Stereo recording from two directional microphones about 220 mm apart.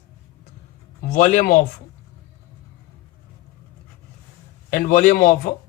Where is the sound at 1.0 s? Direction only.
35° left (ahead or behind).